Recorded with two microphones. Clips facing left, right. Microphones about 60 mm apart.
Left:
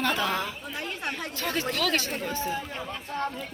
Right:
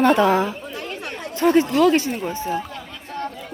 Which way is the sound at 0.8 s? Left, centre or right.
Left.